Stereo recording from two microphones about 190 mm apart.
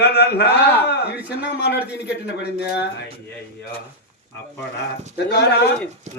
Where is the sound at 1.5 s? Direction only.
65° left (ahead or behind).